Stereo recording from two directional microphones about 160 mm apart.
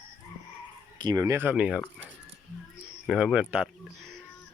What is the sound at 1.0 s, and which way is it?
Speech, 25° right (ahead or behind).